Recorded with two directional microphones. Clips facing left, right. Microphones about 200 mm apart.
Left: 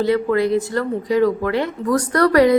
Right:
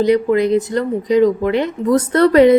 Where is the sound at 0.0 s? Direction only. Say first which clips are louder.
Right 4 dB; 20° right (ahead or behind).